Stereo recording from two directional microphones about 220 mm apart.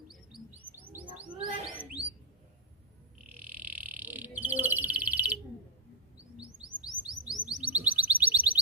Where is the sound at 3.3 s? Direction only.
10° right (ahead or behind).